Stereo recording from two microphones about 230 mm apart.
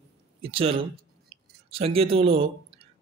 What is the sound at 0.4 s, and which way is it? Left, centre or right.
A man's voice, right.